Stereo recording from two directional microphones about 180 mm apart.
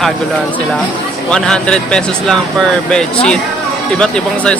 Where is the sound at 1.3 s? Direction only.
5° left (ahead or behind).